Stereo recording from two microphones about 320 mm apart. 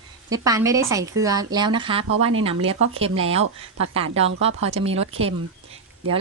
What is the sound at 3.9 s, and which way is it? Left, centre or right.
A woman's voice, centre.